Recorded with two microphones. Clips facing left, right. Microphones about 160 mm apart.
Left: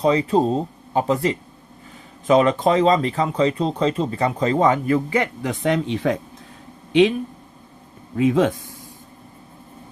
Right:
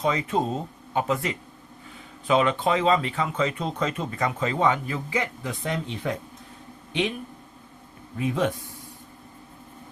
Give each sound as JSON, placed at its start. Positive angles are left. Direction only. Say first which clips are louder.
{"t": 0.0, "sound": "speech", "louder": "left 7 dB", "side_deg": 35}
{"t": 8.1, "sound": "speech", "louder": "left 8 dB", "side_deg": 90}